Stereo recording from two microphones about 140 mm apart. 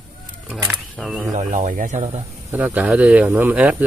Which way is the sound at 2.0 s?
50° right (ahead or behind).